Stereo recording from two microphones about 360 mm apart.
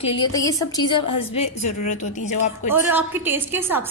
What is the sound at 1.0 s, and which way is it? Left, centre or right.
Speech, left.